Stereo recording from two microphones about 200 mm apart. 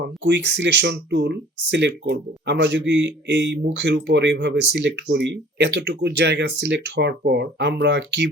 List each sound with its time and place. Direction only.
0.3 s speech: 60° right (ahead or behind)